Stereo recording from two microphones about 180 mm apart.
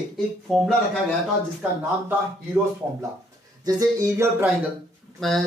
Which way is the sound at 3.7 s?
20° right (ahead or behind).